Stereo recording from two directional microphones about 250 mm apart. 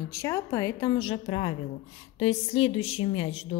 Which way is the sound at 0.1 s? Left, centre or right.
Centre.